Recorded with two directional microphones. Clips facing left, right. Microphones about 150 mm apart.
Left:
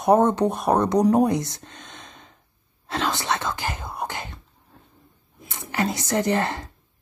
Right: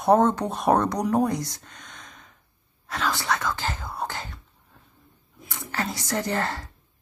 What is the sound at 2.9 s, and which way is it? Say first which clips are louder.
Speech: left 2 dB; 25° left (ahead or behind).